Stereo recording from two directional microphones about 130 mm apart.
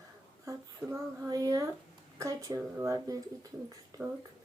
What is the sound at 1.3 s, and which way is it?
A child's voice, 25° right (ahead or behind).